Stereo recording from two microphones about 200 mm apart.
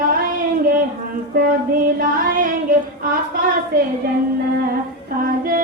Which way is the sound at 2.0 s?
45° right (ahead or behind).